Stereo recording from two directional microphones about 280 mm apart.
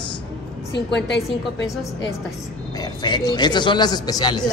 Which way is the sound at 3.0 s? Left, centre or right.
Centre.